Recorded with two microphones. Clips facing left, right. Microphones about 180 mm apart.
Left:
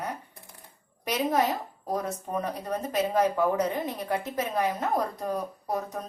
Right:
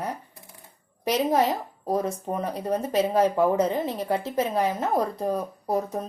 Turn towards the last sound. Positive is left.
turn(degrees=-25)  # may be behind; listen again after turning